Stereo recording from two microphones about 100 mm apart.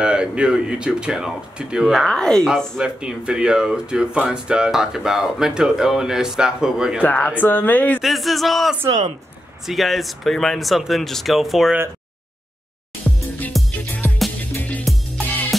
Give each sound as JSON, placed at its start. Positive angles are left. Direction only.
{"t": 0.0, "sound": "speech", "side_deg": -10}
{"t": 7.0, "sound": "speech", "side_deg": 15}
{"t": 8.0, "sound": "speech", "side_deg": 0}
{"t": 8.8, "sound": "speech", "side_deg": -35}
{"t": 9.7, "sound": "speech", "side_deg": 0}
{"t": 13.0, "sound": "music", "side_deg": 5}
{"t": 14.0, "sound": "music", "side_deg": 20}
{"t": 14.9, "sound": "music", "side_deg": 0}